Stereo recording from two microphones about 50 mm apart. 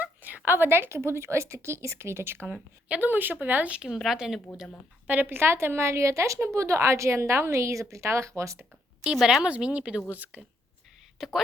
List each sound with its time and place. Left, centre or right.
0.0 s a woman's voice: right
2.9 s speech: right
3.8 s speech: centre
5.0 s a woman's voice: right
9.0 s a woman's voice: centre
9.5 s speech: right
11.2 s speech: centre